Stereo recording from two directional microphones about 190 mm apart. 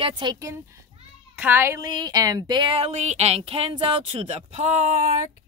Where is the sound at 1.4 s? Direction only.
10° right (ahead or behind).